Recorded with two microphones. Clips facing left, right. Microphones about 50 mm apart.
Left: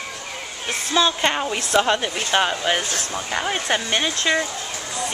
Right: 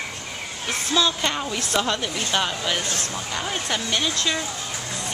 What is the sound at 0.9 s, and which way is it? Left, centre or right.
Speech, left.